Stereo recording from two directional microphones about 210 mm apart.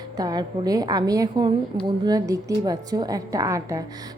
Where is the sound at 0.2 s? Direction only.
20° right (ahead or behind).